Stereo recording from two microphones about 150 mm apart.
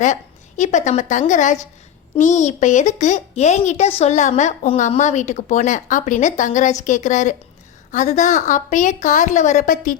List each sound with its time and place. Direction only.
0.0 s a woman's voice: 55° left (ahead or behind)